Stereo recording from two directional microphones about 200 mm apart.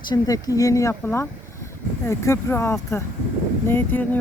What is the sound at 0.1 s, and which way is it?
Speech, 20° left (ahead or behind).